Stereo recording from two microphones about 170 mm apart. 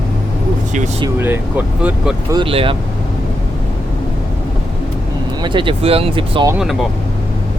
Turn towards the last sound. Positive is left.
turn(degrees=-30)  # may be behind; listen again after turning